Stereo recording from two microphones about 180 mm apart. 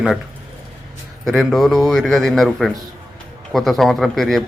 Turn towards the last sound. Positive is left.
turn(degrees=0)  # may be behind; listen again after turning